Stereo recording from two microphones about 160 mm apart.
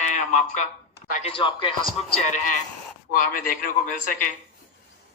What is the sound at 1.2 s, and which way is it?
A man's voice, 30° left (ahead or behind).